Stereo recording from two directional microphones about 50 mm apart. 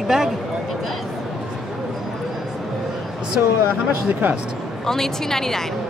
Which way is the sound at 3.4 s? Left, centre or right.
Right.